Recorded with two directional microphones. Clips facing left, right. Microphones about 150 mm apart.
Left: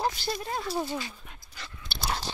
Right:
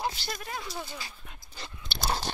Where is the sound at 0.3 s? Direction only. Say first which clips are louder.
Left 6 dB; 30° left (ahead or behind).